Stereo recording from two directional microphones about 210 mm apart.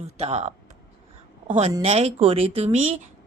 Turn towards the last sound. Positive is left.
turn(degrees=-35)  # may be behind; listen again after turning